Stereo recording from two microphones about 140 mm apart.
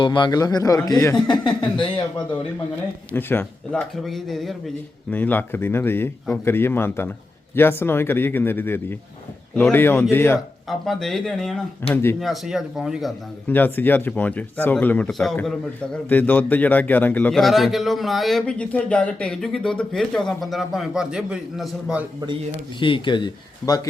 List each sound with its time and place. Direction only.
0.0 s a man's voice: 35° left (ahead or behind)
3.1 s speech: 15° left (ahead or behind)
5.1 s speech: 10° left (ahead or behind)
10.7 s a man's voice: centre (ahead or behind)
11.8 s speech: 15° left (ahead or behind)
12.2 s a man's voice: centre (ahead or behind)
13.5 s a man's voice: 15° left (ahead or behind); by 22.0 s 5° right (ahead or behind)
22.8 s speech: 35° left (ahead or behind)